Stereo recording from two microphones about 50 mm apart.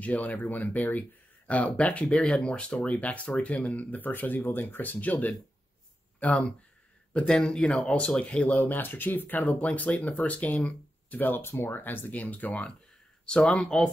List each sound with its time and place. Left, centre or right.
0.0 s speech: left
6.1 s speech: left
7.2 s speech: centre
8.6 s speech: left
9.4 s speech: left
11.4 s speech: left
12.1 s speech: left; by 13.9 s centre